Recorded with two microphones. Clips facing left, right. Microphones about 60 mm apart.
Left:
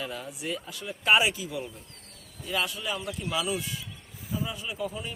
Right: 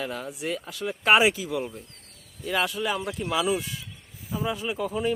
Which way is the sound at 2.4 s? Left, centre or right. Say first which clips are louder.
Right 5 dB; right.